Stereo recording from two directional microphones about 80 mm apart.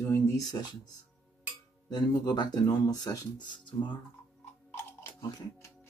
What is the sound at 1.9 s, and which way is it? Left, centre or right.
Speech, left.